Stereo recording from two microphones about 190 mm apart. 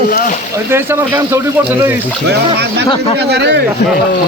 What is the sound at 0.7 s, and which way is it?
Speech, 15° right (ahead or behind).